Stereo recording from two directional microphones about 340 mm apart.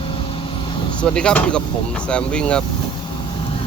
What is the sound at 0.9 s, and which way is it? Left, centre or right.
Speech, centre.